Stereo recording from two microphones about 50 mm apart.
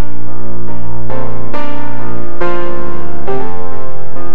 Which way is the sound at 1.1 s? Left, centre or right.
Centre.